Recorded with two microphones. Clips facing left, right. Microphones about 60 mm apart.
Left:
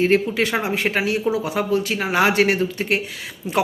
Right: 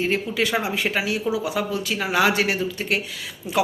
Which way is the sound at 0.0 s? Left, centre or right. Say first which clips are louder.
Left 5 dB; left.